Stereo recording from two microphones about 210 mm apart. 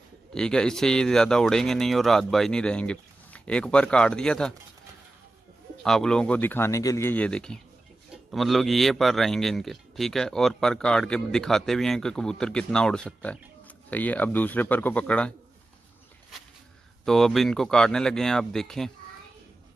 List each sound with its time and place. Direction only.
0.3 s a man's voice: 5° left (ahead or behind)
5.8 s a man's voice: 5° left (ahead or behind)
17.0 s a man's voice: centre (ahead or behind)